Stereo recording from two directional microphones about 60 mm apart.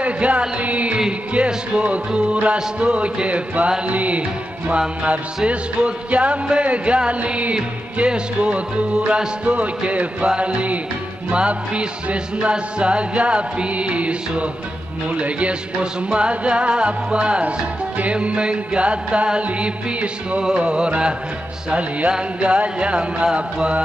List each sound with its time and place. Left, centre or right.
0.0 s music: right